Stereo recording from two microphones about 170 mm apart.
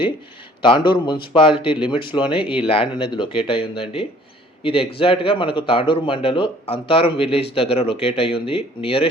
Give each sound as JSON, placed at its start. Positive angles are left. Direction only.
{"t": 0.6, "sound": "speech", "side_deg": 30}